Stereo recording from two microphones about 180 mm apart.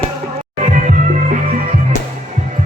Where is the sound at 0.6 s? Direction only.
40° right (ahead or behind).